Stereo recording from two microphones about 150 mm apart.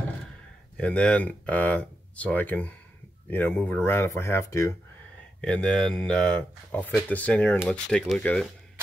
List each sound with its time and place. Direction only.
0.7 s speech: 5° left (ahead or behind)
5.4 s speech: 5° left (ahead or behind)